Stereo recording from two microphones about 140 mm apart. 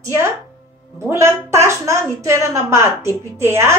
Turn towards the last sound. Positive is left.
turn(degrees=-20)  # may be behind; listen again after turning